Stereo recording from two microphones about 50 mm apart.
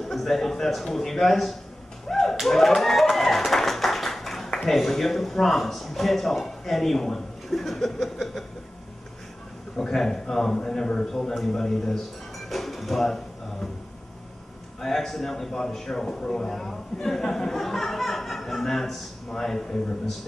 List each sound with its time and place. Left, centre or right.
0.0 s a man's voice: centre
9.8 s a man's voice: centre
12.4 s dishes: centre
14.8 s a man's voice: centre